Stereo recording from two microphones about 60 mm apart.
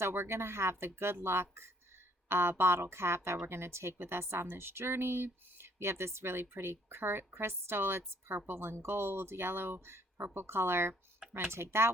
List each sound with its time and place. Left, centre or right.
0.0 s a woman's voice: right